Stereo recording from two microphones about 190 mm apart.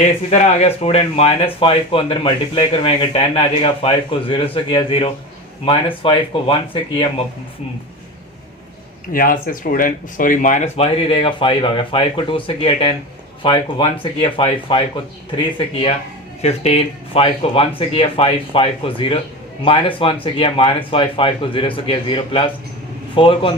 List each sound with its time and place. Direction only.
0.0 s speech: 35° left (ahead or behind)
9.1 s speech: 45° left (ahead or behind)
10.9 s speech: 25° left (ahead or behind)